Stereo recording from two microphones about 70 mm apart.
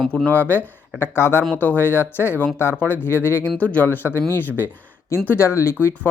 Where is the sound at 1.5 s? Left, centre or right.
Left.